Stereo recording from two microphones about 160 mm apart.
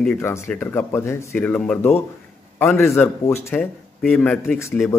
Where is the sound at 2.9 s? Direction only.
15° left (ahead or behind).